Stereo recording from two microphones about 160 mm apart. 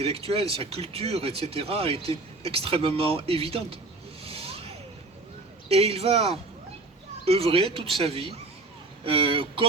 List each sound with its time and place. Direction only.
0.0 s speech: 40° right (ahead or behind)
4.2 s a sound: 35° right (ahead or behind)
5.6 s speech: 40° right (ahead or behind)